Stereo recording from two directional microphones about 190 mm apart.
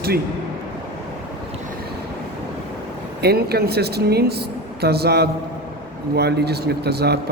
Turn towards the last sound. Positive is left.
turn(degrees=-60)  # may be behind; listen again after turning